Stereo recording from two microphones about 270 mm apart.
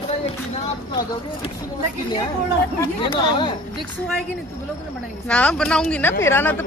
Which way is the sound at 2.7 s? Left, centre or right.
Centre.